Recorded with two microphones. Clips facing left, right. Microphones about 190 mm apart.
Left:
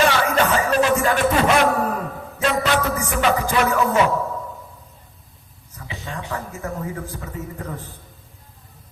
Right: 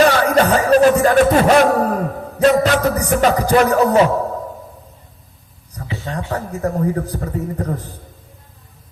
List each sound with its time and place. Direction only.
0.1 s music: 40° right (ahead or behind)
6.1 s a man's voice: 40° right (ahead or behind)